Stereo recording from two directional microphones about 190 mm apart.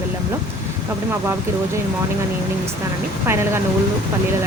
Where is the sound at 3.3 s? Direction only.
15° right (ahead or behind).